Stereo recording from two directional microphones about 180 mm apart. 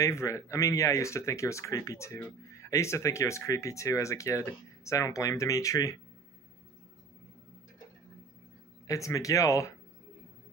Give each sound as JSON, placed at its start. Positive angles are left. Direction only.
{"t": 0.0, "sound": "speech", "side_deg": 15}
{"t": 8.8, "sound": "speech", "side_deg": 15}